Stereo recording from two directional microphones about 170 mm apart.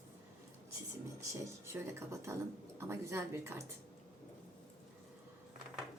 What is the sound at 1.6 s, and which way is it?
A woman's voice, 15° right (ahead or behind).